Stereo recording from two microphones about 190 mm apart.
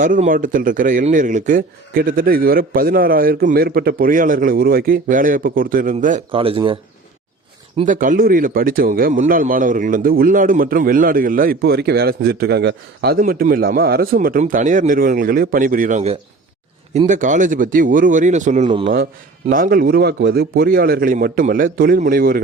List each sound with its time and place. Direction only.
0.0 s speech: 45° right (ahead or behind)
6.3 s speech: 30° right (ahead or behind)
7.9 s speech: 45° right (ahead or behind)